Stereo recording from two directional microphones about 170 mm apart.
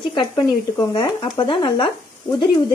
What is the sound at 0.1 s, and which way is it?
Speech, 25° left (ahead or behind).